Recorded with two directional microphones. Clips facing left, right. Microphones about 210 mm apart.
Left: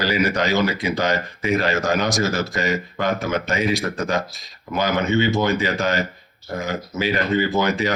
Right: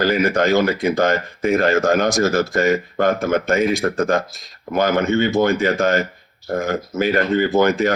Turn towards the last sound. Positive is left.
turn(degrees=-50)  # may be behind; listen again after turning